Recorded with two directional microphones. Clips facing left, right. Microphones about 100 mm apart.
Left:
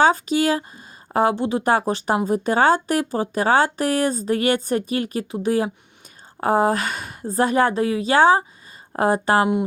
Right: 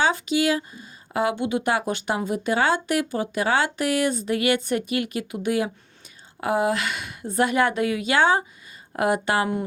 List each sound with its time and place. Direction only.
0.0 s speech: 40° left (ahead or behind)